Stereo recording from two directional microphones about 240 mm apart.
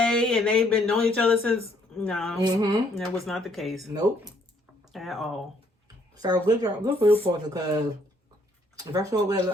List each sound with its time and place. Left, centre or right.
0.0 s speech: centre
2.4 s speech: centre
2.9 s speech: centre
4.9 s speech: centre
6.1 s speech: centre